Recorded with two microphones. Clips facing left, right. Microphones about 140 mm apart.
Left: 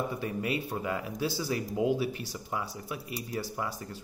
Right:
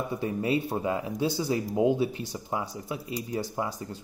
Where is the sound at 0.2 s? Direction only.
25° right (ahead or behind).